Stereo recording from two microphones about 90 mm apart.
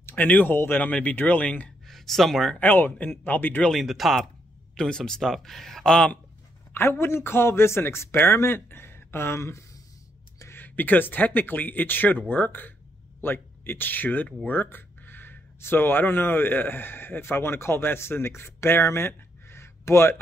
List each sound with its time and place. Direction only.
0.0 s a man's voice: 20° left (ahead or behind)
1.9 s speech: centre (ahead or behind)
2.6 s a man's voice: 20° left (ahead or behind)
3.7 s speech: centre (ahead or behind)
6.7 s a man's voice: 25° left (ahead or behind)